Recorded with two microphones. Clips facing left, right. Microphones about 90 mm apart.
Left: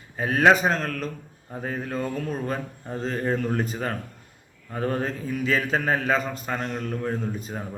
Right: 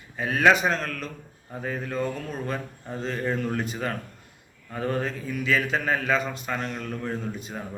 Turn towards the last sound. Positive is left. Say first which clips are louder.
# left 2 dB
turn(degrees=35)  # may be behind; listen again after turning